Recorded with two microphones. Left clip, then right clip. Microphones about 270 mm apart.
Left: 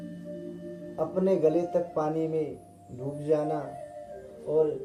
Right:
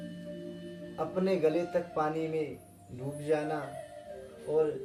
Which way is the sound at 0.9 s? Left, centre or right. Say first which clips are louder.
Left 5 dB; right.